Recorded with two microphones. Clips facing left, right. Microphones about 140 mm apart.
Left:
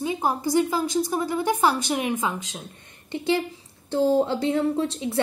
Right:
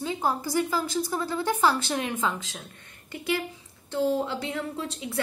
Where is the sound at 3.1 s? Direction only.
25° left (ahead or behind).